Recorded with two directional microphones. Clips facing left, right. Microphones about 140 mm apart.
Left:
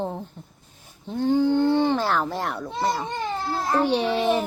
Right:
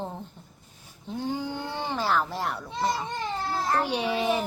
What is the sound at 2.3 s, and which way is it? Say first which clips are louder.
Children playing: left 3 dB; centre (ahead or behind).